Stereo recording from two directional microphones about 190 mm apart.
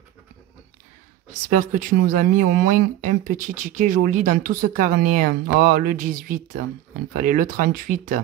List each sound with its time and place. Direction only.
1.5 s speech: 40° right (ahead or behind)